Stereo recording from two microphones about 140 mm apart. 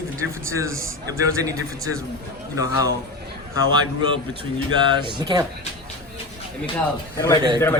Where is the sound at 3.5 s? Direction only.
30° right (ahead or behind).